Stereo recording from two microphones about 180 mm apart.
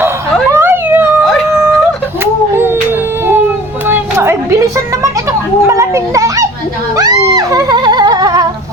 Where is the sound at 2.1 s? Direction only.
10° right (ahead or behind).